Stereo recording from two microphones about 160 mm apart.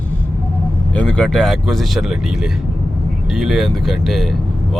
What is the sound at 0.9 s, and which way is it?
Speech, 10° left (ahead or behind).